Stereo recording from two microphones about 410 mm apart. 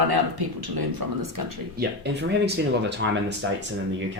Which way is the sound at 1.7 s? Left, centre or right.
Right.